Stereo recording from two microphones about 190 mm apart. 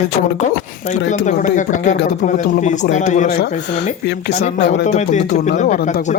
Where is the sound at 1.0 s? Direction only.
40° left (ahead or behind).